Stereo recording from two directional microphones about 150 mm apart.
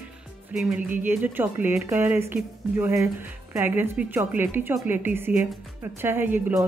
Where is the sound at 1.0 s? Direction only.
10° right (ahead or behind).